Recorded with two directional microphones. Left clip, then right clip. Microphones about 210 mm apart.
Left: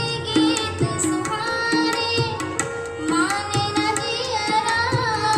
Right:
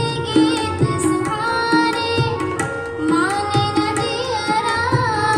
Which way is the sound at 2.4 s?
35° left (ahead or behind).